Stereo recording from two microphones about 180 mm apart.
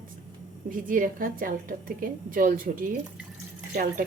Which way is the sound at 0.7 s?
50° right (ahead or behind).